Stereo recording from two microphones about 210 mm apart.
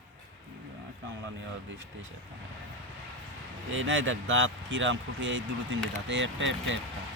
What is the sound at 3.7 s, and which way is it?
Speech, 65° right (ahead or behind).